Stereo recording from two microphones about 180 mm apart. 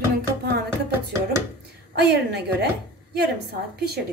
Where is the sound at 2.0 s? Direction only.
65° right (ahead or behind).